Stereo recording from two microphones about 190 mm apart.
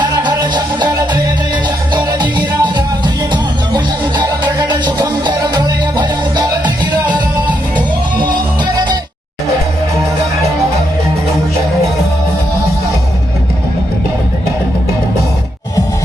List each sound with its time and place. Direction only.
0.0 s music: 20° right (ahead or behind)